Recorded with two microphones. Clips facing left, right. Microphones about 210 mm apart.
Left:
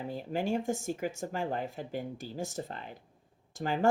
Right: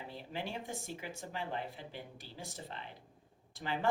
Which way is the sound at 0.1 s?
45° left (ahead or behind).